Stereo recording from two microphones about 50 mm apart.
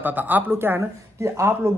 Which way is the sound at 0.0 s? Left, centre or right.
Right.